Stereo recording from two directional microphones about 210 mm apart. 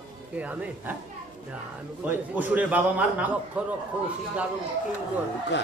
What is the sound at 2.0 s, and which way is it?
A man's voice, 10° right (ahead or behind).